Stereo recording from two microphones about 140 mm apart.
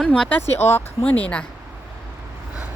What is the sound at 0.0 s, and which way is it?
Speech, 5° left (ahead or behind).